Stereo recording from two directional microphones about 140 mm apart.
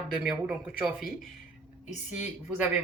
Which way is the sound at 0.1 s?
Centre (ahead or behind).